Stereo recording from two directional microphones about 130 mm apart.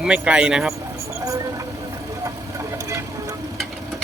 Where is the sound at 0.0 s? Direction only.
10° right (ahead or behind).